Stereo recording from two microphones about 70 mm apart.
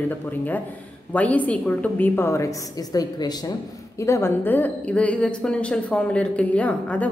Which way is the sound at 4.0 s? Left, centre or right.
Left.